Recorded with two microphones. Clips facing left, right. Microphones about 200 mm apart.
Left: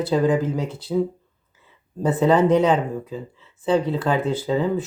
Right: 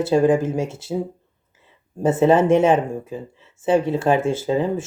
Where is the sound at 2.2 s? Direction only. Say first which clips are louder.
Right 1 dB; 25° right (ahead or behind).